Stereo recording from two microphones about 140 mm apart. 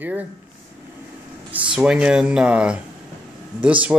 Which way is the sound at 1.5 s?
5° right (ahead or behind).